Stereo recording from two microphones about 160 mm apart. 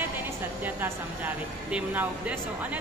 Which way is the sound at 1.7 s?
10° right (ahead or behind).